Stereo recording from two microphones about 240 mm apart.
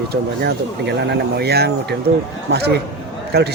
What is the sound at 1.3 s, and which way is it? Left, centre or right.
A man's voice, right.